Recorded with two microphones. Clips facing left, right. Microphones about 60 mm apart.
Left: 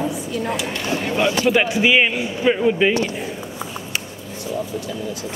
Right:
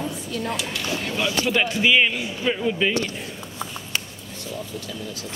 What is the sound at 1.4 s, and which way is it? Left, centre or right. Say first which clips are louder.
Speech: left 2 dB; centre.